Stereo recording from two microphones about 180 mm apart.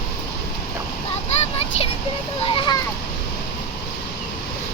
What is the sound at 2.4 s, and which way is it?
Speech, 30° left (ahead or behind).